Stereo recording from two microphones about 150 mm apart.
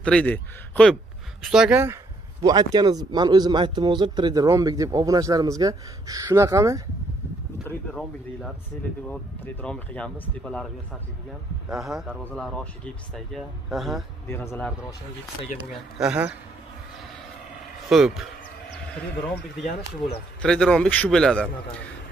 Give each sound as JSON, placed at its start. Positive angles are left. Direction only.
{"t": 0.0, "sound": "a man's voice", "side_deg": 10}
{"t": 1.4, "sound": "speech", "side_deg": -5}
{"t": 2.4, "sound": "speech", "side_deg": -25}
{"t": 9.0, "sound": "speech", "side_deg": 10}
{"t": 11.7, "sound": "speech", "side_deg": 0}
{"t": 14.2, "sound": "speech", "side_deg": 15}
{"t": 15.7, "sound": "speech", "side_deg": -5}
{"t": 17.8, "sound": "speech", "side_deg": 0}
{"t": 20.4, "sound": "speech", "side_deg": 5}